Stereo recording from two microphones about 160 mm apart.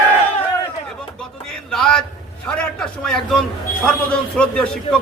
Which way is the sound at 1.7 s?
5° left (ahead or behind).